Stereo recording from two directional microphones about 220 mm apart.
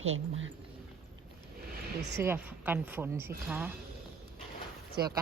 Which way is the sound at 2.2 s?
10° right (ahead or behind).